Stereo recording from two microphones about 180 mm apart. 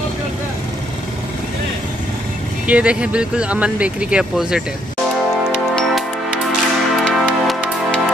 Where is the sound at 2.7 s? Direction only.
5° right (ahead or behind).